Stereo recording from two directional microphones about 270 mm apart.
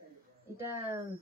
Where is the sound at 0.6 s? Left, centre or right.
Centre.